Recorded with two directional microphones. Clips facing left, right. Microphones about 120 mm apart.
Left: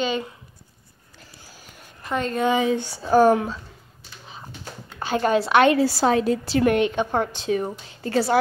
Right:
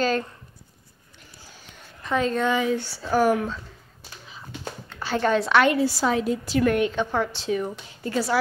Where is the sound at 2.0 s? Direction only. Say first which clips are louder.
Right 2 dB; centre (ahead or behind).